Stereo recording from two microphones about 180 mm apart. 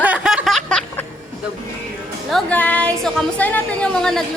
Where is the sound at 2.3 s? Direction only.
5° left (ahead or behind).